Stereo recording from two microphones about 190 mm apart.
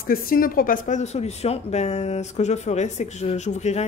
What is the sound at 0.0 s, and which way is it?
A woman's voice, 50° left (ahead or behind).